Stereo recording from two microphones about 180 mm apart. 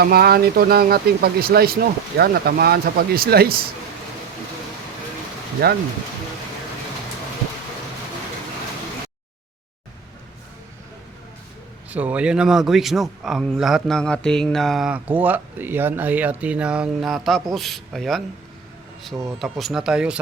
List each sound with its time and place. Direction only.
0.0 s speech: 60° right (ahead or behind)
5.6 s speech: 60° right (ahead or behind)
11.9 s a man's voice: 10° right (ahead or behind)
19.4 s a man's voice: centre (ahead or behind)